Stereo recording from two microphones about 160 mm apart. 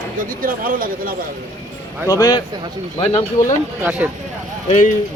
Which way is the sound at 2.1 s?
25° left (ahead or behind).